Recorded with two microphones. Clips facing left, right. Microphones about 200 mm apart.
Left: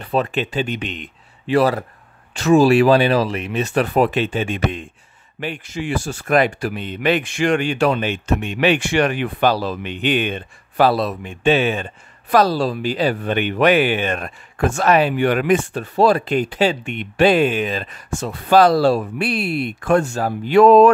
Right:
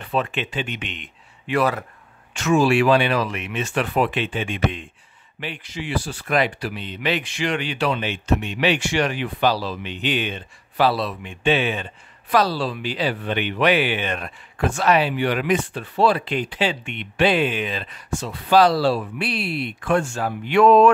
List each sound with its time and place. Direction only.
0.0 s speech: 40° left (ahead or behind)